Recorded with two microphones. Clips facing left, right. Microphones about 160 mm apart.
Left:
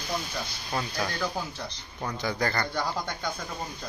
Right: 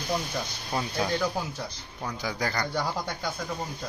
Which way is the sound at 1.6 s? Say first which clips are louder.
Left 1 dB; 10° right (ahead or behind).